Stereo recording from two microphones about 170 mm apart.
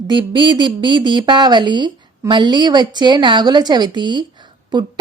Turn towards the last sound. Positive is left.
turn(degrees=-25)  # may be behind; listen again after turning